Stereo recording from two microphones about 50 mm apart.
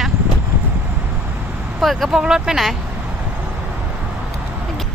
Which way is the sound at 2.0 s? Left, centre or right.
Centre.